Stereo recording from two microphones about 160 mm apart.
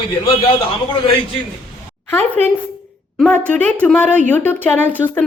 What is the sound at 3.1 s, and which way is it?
A woman's voice, centre (ahead or behind).